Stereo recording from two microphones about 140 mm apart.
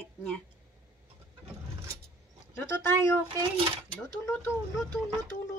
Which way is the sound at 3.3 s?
40° right (ahead or behind).